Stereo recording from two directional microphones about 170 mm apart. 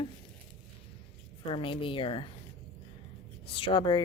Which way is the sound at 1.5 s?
30° left (ahead or behind).